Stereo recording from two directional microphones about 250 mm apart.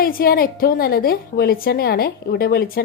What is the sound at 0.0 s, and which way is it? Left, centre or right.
A woman's voice, left.